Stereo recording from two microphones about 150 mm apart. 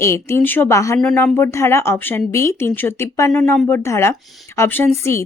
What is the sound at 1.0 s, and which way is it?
Speech, 10° left (ahead or behind).